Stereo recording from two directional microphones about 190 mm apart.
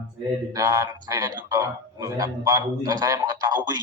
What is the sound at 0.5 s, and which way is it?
A man's voice, 15° right (ahead or behind).